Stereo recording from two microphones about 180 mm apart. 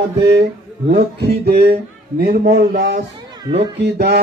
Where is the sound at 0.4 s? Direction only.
65° right (ahead or behind).